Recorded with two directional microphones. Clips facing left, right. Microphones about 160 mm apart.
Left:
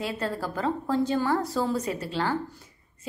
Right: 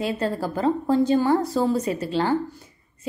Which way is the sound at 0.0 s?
25° right (ahead or behind).